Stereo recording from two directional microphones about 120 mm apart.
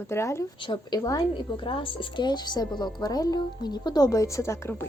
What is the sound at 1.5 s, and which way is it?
A woman's voice, 45° left (ahead or behind).